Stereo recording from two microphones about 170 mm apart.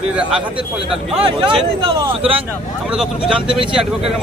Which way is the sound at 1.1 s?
35° right (ahead or behind).